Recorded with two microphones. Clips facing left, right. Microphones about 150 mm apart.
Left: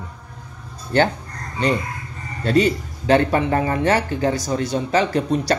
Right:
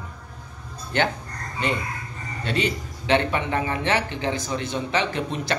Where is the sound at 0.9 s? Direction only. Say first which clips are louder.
Left 6 dB; 35° left (ahead or behind).